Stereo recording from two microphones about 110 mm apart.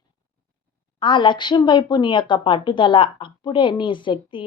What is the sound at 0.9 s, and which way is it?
A woman's voice, 50° left (ahead or behind).